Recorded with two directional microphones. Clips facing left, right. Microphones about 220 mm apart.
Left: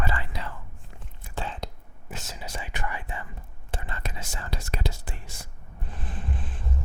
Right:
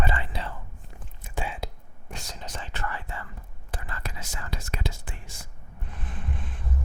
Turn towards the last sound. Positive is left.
turn(degrees=30)  # may be behind; listen again after turning